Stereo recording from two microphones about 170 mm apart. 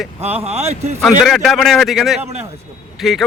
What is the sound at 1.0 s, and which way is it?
Speech, centre (ahead or behind).